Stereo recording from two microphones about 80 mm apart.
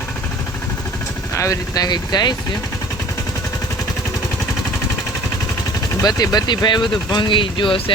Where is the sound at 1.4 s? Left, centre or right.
Left.